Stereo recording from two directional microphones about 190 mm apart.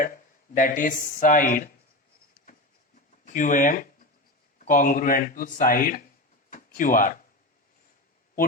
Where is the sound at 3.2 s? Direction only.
45° left (ahead or behind).